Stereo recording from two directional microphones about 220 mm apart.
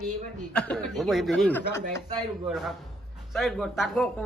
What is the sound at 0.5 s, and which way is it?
Speech, 5° left (ahead or behind).